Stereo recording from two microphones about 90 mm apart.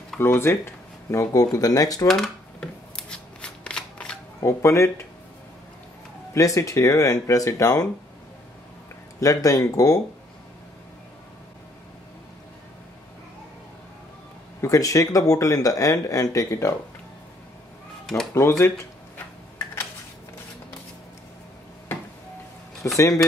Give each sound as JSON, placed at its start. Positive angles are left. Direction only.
{"t": 0.2, "sound": "speech", "side_deg": 25}
{"t": 1.1, "sound": "speech", "side_deg": 40}
{"t": 2.0, "sound": "a sound", "side_deg": 5}
{"t": 3.0, "sound": "shuffling cards", "side_deg": 10}
{"t": 4.4, "sound": "speech", "side_deg": 30}
{"t": 6.3, "sound": "speech", "side_deg": 40}
{"t": 9.2, "sound": "speech", "side_deg": 40}
{"t": 14.6, "sound": "speech", "side_deg": 40}
{"t": 18.3, "sound": "speech", "side_deg": 30}
{"t": 22.8, "sound": "speech", "side_deg": 25}